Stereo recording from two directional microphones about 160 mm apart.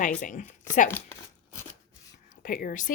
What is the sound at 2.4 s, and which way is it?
Speech, 60° left (ahead or behind).